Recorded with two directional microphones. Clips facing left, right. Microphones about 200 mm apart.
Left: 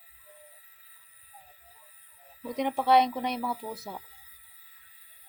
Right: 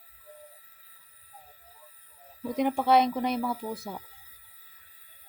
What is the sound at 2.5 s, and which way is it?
Speech, centre (ahead or behind).